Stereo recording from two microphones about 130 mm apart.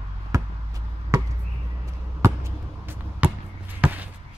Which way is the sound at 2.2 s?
20° right (ahead or behind).